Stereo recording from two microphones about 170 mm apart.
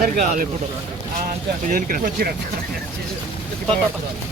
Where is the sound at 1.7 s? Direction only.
55° right (ahead or behind).